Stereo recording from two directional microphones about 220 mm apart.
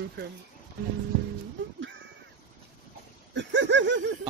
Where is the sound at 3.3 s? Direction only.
55° right (ahead or behind).